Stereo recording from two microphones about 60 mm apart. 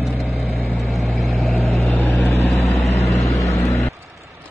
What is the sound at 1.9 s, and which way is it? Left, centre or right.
Vehicle, left.